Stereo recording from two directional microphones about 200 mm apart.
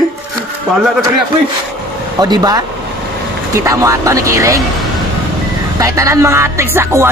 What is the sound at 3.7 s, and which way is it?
Music, 15° right (ahead or behind).